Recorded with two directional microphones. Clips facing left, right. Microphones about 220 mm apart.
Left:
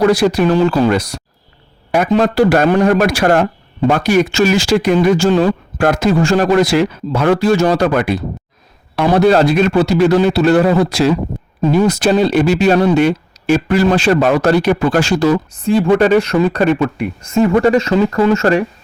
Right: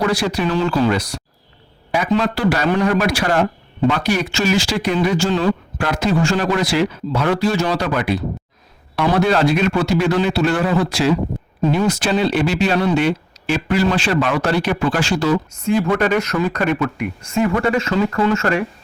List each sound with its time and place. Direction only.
0.4 s speech: 45° left (ahead or behind)